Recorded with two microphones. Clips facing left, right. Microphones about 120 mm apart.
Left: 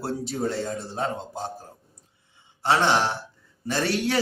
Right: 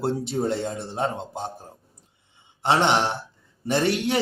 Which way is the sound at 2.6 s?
20° right (ahead or behind).